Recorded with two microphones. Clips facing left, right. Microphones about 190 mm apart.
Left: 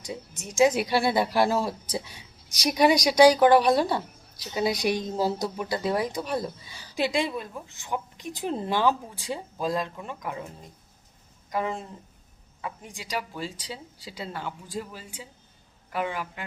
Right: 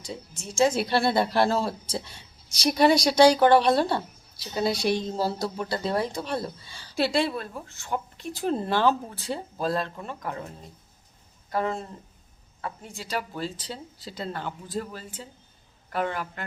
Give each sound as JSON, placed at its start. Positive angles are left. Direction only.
{"t": 0.0, "sound": "speech", "side_deg": 20}
{"t": 11.5, "sound": "speech", "side_deg": 15}